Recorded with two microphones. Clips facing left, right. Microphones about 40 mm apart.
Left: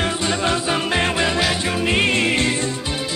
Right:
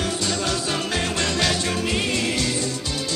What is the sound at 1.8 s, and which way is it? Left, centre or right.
Music, left.